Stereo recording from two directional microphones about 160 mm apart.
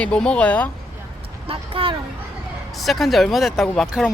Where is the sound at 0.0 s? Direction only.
5° left (ahead or behind).